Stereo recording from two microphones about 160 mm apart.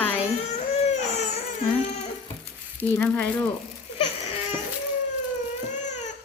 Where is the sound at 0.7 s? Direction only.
45° left (ahead or behind).